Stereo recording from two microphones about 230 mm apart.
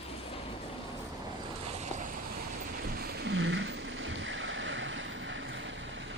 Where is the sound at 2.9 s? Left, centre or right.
Right.